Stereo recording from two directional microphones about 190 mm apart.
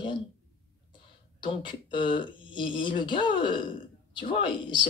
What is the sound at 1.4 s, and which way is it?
Speech, 25° left (ahead or behind).